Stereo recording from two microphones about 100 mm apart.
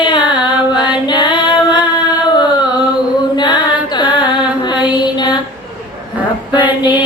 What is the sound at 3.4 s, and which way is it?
Carnatic music, 50° left (ahead or behind).